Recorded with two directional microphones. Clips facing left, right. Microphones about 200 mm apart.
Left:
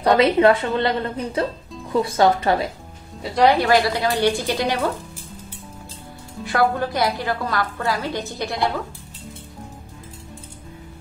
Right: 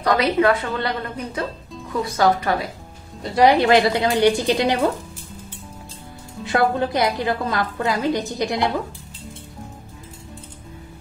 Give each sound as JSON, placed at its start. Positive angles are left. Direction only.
{"t": 0.0, "sound": "a woman's voice", "side_deg": 25}
{"t": 3.3, "sound": "a woman's voice", "side_deg": -20}
{"t": 6.4, "sound": "a woman's voice", "side_deg": -25}